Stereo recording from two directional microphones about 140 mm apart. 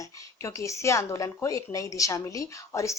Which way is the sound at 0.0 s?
25° left (ahead or behind).